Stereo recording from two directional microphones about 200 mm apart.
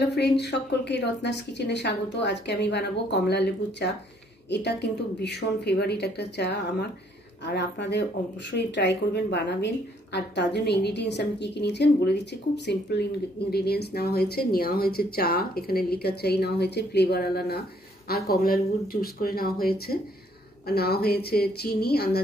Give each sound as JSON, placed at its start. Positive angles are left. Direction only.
{"t": 0.1, "sound": "a woman's voice", "side_deg": 55}